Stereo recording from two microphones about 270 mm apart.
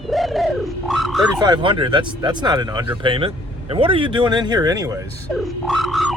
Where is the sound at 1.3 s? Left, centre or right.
Centre.